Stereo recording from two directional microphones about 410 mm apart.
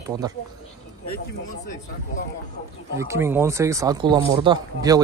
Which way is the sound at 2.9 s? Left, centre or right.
Centre.